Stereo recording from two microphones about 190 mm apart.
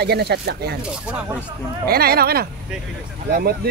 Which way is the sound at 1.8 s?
55° right (ahead or behind).